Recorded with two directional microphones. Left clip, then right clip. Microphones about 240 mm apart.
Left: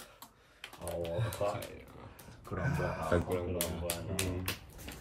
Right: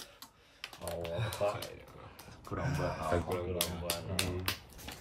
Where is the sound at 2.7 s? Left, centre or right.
Centre.